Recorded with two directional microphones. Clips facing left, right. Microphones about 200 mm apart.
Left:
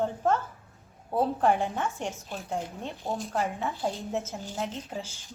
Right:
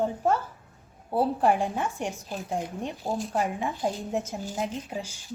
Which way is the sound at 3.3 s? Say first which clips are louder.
Right 2 dB; 15° right (ahead or behind).